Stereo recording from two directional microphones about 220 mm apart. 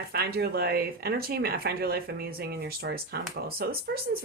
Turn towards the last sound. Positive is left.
turn(degrees=-45)  # may be behind; listen again after turning